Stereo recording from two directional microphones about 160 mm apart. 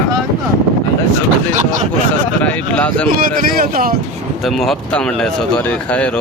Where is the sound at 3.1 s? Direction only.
60° right (ahead or behind).